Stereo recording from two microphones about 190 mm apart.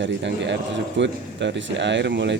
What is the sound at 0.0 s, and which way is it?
A man's voice, 70° right (ahead or behind).